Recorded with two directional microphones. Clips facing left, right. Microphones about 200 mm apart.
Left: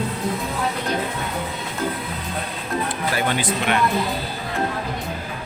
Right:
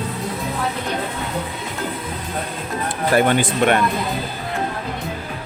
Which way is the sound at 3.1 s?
50° right (ahead or behind).